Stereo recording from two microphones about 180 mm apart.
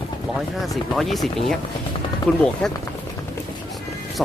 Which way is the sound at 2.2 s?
25° left (ahead or behind).